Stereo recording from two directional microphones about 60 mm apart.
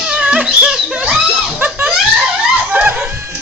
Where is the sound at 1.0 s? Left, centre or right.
Centre.